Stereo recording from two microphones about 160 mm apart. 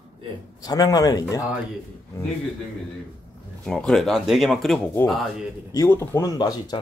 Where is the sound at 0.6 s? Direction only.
25° left (ahead or behind).